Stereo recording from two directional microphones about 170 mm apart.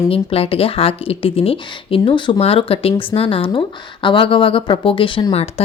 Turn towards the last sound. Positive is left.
turn(degrees=30)  # may be behind; listen again after turning